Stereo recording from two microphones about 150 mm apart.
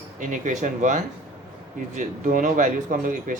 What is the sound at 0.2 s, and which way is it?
A man's voice, 55° right (ahead or behind).